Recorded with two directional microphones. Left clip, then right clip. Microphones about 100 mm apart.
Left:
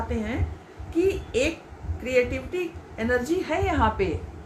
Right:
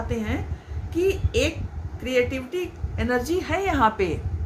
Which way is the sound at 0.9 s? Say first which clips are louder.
Right 1 dB; 75° right (ahead or behind).